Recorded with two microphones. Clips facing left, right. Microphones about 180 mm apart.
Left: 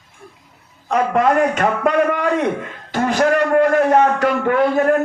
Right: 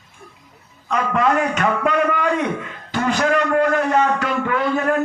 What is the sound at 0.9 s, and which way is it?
A man's voice, 45° left (ahead or behind).